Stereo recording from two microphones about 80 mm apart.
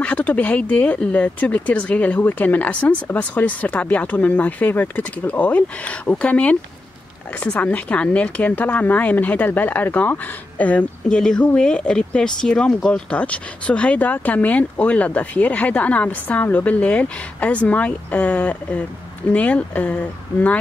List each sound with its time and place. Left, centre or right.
0.0 s speech: centre